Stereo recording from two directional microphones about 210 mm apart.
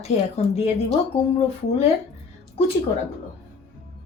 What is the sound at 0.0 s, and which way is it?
Speech, 30° left (ahead or behind).